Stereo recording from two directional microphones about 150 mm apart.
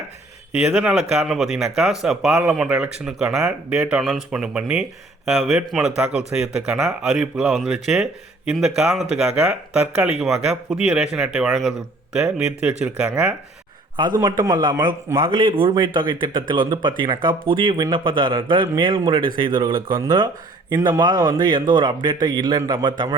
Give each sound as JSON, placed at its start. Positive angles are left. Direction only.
{"t": 0.7, "sound": "speech", "side_deg": -5}
{"t": 14.2, "sound": "speech", "side_deg": -20}